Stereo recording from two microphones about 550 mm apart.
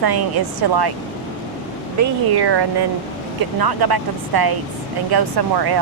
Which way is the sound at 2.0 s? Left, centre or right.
Right.